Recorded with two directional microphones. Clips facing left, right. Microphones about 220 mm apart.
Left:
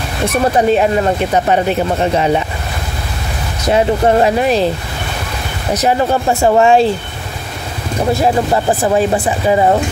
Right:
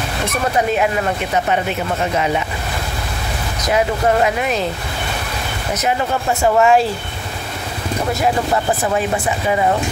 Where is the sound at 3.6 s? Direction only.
30° left (ahead or behind).